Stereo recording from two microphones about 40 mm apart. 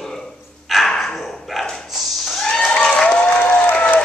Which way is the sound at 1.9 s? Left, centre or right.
Centre.